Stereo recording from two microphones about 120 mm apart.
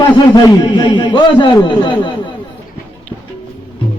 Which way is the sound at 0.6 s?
40° left (ahead or behind).